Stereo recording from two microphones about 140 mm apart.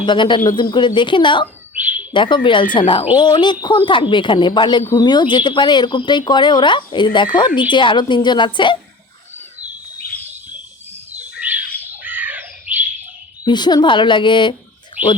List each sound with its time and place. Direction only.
0.0 s speech: 35° left (ahead or behind)
1.8 s bird: 10° right (ahead or behind)
2.1 s speech: 35° left (ahead or behind)
11.2 s bird: 10° right (ahead or behind)
13.4 s speech: 30° left (ahead or behind)
15.0 s a sound: 10° right (ahead or behind)